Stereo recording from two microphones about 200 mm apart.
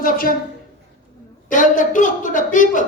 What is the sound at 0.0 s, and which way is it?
Speech, 45° left (ahead or behind).